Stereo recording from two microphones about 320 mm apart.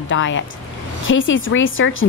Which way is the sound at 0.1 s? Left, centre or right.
Left.